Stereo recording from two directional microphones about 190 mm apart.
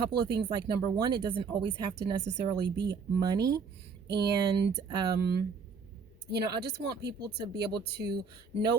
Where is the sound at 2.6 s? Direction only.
65° right (ahead or behind).